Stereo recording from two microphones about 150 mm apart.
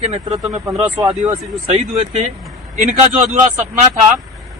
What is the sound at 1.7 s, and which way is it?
Speech, 50° right (ahead or behind).